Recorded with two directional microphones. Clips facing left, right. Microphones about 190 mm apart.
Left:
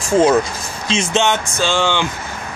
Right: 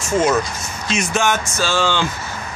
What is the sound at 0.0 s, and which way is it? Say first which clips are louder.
Speech: left 4 dB; 30° left (ahead or behind).